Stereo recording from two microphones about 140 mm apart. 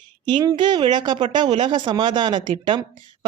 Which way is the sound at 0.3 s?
35° right (ahead or behind).